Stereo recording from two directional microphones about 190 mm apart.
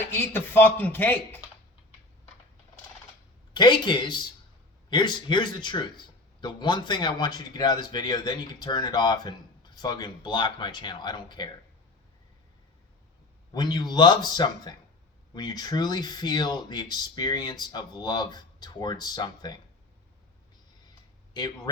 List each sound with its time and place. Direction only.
0.1 s a man's voice: 10° left (ahead or behind)
3.5 s speech: 25° left (ahead or behind)
13.5 s speech: 20° left (ahead or behind)
21.3 s speech: 20° left (ahead or behind)